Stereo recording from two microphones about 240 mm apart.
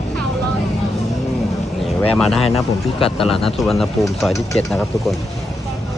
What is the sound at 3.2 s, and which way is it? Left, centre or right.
Speech, centre.